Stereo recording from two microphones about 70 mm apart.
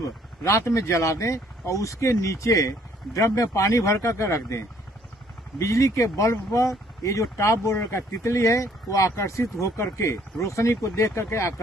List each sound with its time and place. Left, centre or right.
0.4 s speech: left